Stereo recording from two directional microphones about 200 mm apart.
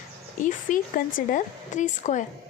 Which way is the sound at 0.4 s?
45° left (ahead or behind).